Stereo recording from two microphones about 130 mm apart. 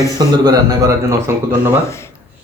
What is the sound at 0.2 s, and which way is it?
Speech, 30° right (ahead or behind).